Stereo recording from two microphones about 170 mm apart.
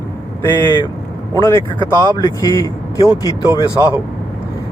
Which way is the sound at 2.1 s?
20° left (ahead or behind).